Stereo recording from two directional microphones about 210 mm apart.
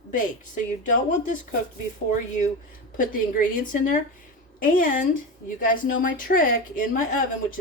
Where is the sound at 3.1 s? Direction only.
40° left (ahead or behind).